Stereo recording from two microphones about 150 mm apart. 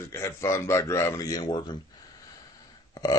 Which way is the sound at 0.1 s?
20° left (ahead or behind).